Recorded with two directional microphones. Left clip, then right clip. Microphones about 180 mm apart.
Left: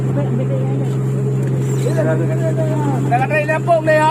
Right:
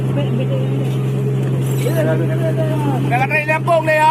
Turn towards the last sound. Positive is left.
turn(degrees=70)  # may be behind; listen again after turning